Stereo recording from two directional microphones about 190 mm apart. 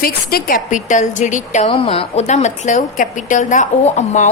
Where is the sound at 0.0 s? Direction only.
50° left (ahead or behind).